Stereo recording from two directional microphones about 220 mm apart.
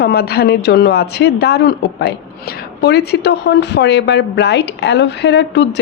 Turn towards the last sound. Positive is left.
turn(degrees=50)  # may be behind; listen again after turning